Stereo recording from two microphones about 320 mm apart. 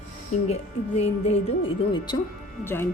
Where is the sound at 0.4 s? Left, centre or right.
Centre.